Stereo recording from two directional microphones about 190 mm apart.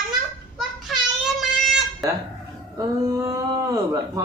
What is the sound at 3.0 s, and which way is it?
Speech, 15° right (ahead or behind).